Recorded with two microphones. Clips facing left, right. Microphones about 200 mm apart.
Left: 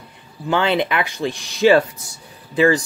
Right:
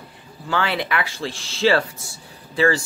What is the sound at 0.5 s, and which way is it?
Speech, 20° left (ahead or behind).